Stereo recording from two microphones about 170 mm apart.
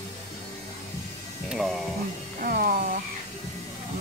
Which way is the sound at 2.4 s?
60° right (ahead or behind).